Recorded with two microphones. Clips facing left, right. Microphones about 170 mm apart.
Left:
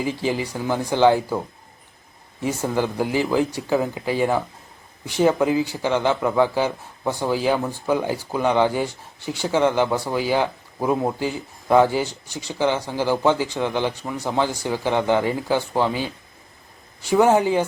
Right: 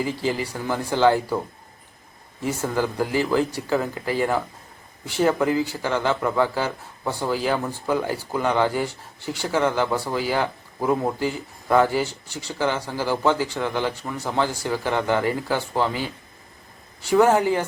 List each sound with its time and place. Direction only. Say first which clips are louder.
0.0 s speech: left 1 dB; 15° left (ahead or behind)
2.4 s speech: left 1 dB; 15° left (ahead or behind)
17.1 s speech: left 1 dB; 20° left (ahead or behind)